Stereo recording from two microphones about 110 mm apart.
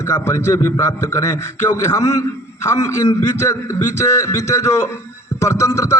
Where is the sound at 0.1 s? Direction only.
25° left (ahead or behind).